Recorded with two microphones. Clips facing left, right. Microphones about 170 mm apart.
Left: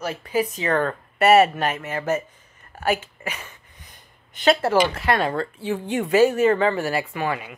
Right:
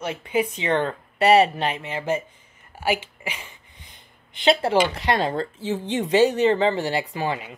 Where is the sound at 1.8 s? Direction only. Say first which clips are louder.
Left 1 dB; 15° right (ahead or behind).